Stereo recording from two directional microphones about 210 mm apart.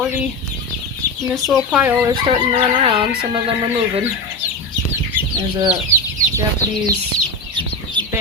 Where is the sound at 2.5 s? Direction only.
25° right (ahead or behind).